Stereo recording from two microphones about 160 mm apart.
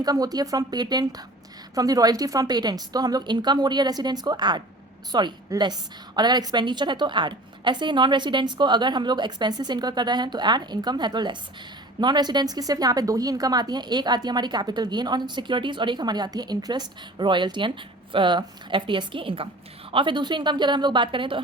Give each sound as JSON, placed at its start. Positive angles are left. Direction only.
{"t": 0.0, "sound": "a woman's voice", "side_deg": -25}